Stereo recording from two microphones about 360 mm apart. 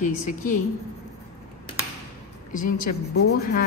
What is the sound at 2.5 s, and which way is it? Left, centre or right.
Speech, left.